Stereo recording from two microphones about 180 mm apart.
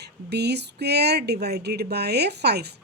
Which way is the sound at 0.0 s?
70° right (ahead or behind).